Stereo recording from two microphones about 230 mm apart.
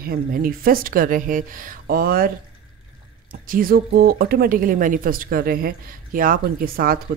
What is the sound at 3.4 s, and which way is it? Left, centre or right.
Speech, right.